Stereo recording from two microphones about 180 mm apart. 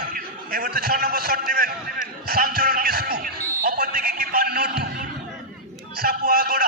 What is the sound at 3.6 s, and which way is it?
Music, 55° right (ahead or behind).